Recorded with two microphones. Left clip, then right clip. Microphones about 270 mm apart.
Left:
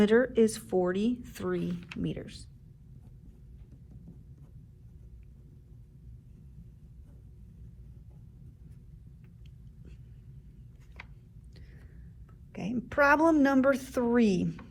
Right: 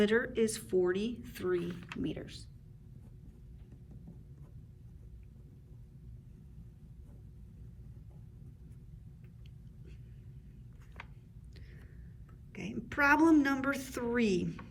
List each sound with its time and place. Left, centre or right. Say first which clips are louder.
0.0 s a woman's voice: left 6 dB; centre
1.6 s speech: left 3 dB; centre
2.0 s speech: left 3 dB; left
12.5 s a woman's voice: left 6 dB; centre